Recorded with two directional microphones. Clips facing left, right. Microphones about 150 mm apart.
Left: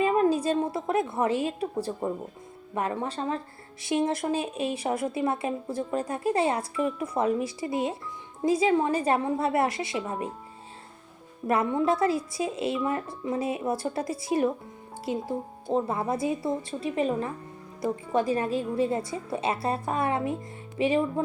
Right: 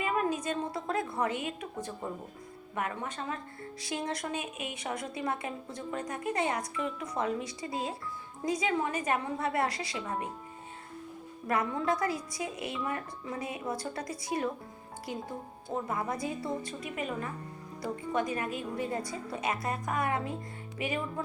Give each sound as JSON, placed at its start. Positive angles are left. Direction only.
{"t": 0.0, "sound": "a sound", "side_deg": 30}
{"t": 1.1, "sound": "a woman's voice", "side_deg": 25}
{"t": 11.4, "sound": "speech", "side_deg": 25}